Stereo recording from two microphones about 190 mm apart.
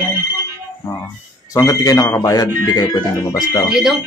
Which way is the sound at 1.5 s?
20° left (ahead or behind).